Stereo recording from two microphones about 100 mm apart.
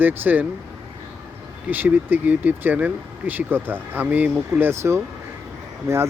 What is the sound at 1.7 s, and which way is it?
Speech, 20° right (ahead or behind).